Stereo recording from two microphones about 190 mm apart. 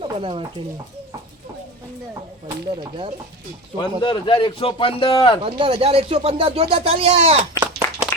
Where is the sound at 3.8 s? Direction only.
25° left (ahead or behind).